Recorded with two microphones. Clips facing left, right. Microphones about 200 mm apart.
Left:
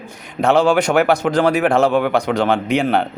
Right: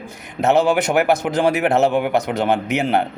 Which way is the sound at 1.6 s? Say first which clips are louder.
Left 2 dB; 20° right (ahead or behind).